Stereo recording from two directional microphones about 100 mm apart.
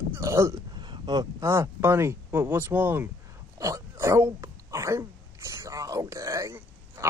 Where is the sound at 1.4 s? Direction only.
30° right (ahead or behind).